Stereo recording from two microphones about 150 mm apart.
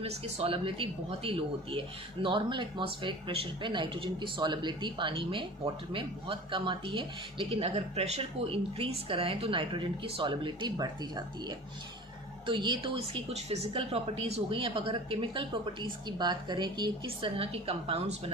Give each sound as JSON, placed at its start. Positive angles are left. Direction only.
{"t": 0.0, "sound": "speech", "side_deg": -40}